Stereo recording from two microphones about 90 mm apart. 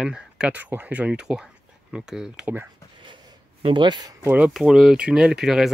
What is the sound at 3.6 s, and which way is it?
Speech, 60° right (ahead or behind).